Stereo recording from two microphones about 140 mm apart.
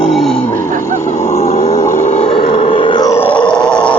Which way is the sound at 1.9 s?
55° left (ahead or behind).